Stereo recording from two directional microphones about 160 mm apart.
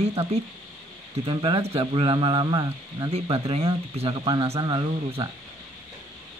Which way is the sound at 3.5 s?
40° right (ahead or behind).